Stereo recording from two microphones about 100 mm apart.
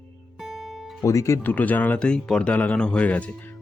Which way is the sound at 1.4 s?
15° left (ahead or behind).